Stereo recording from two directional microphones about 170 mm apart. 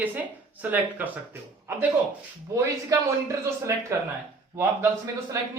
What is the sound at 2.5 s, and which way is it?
Speech, 20° right (ahead or behind).